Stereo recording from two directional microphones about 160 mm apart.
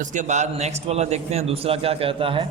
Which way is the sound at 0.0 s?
50° right (ahead or behind).